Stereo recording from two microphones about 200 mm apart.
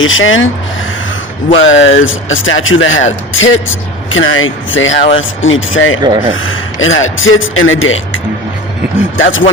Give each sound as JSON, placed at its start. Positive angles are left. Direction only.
{"t": 0.0, "sound": "a man's voice", "side_deg": 80}
{"t": 1.5, "sound": "a man's voice", "side_deg": 70}
{"t": 6.0, "sound": "speech", "side_deg": -20}
{"t": 6.3, "sound": "a man's voice", "side_deg": 85}
{"t": 9.1, "sound": "speech", "side_deg": 75}